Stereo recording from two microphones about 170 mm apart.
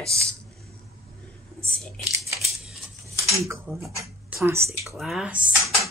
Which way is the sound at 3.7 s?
15° right (ahead or behind).